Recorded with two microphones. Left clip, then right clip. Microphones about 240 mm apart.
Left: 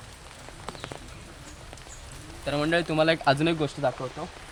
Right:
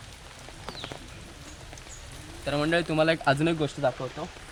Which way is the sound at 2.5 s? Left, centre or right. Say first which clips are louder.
Even; centre.